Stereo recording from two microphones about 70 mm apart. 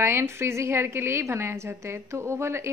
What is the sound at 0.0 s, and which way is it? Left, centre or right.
A woman's voice, right.